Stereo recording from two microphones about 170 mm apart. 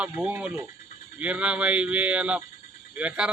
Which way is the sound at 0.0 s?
10° right (ahead or behind).